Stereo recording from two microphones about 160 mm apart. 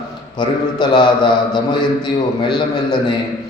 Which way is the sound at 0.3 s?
30° left (ahead or behind).